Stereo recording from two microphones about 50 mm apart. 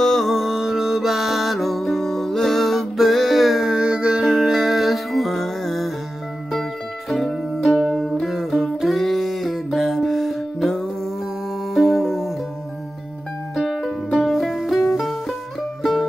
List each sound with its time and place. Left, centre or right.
0.0 s music: centre
7.6 s music: centre
7.9 s music: centre
11.7 s music: centre
13.6 s music: centre
14.2 s music: centre